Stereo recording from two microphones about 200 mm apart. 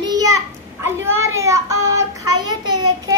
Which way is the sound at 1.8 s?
15° right (ahead or behind).